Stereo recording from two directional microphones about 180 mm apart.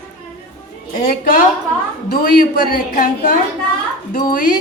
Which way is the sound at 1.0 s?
50° left (ahead or behind).